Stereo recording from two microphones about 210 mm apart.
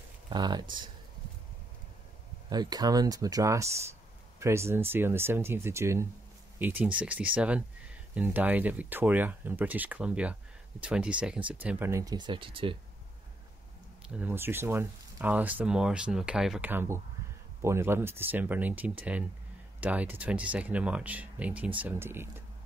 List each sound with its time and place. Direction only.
0.3 s speech: 20° right (ahead or behind)
2.5 s speech: 20° right (ahead or behind)
14.0 s speech: 5° right (ahead or behind)